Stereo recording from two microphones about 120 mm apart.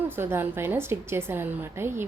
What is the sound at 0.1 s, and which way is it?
A woman's voice, 20° right (ahead or behind).